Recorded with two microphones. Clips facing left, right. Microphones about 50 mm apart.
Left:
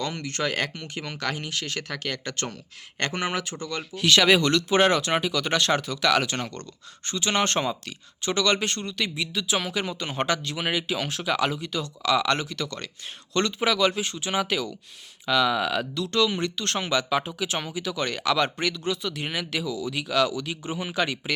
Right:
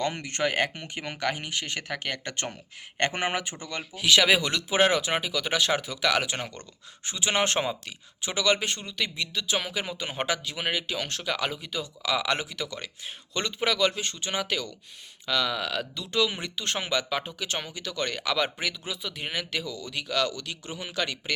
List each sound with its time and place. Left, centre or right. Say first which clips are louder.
0.0 s speech: right 1 dB; centre
16.1 s speech: left 3 dB; centre